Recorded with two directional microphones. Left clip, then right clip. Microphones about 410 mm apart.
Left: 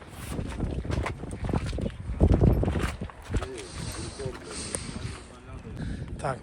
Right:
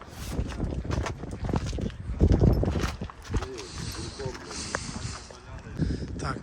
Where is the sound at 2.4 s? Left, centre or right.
Centre.